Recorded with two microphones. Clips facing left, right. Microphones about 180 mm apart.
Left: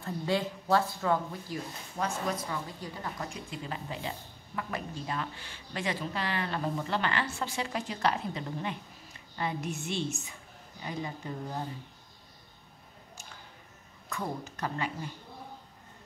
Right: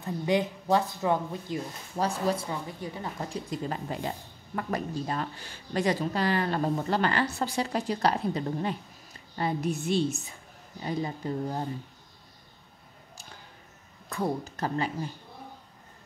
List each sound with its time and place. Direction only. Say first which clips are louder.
0.0 s speech: right 4 dB; 15° right (ahead or behind)
2.0 s speech: right 5 dB; 35° right (ahead or behind)
14.0 s speech: right 6 dB; 35° right (ahead or behind)